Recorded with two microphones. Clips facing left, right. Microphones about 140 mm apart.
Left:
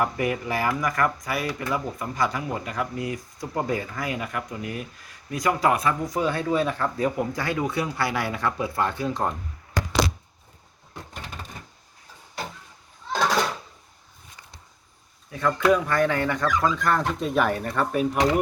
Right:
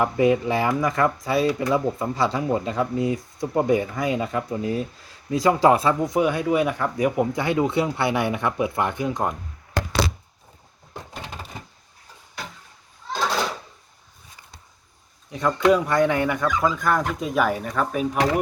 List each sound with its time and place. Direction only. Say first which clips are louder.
0.0 s speech: right 6 dB; 20° right (ahead or behind)
15.3 s speech: right 2 dB; 20° right (ahead or behind); by 18.2 s centre (ahead or behind)